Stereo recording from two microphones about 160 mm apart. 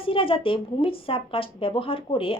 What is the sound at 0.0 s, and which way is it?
A woman's voice, 35° left (ahead or behind).